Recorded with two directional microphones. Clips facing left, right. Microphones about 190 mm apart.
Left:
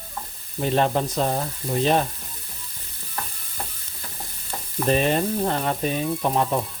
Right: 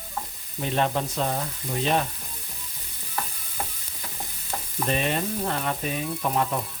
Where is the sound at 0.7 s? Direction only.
35° left (ahead or behind).